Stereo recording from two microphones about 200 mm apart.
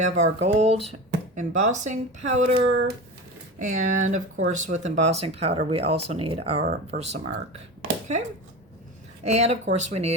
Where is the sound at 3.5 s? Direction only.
40° right (ahead or behind).